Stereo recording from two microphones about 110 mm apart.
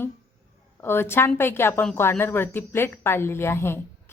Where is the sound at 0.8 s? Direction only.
20° left (ahead or behind).